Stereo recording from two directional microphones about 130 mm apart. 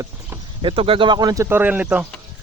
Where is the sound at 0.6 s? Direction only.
40° right (ahead or behind); by 2.0 s 10° right (ahead or behind).